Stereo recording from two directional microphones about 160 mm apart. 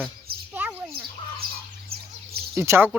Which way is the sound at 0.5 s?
10° right (ahead or behind).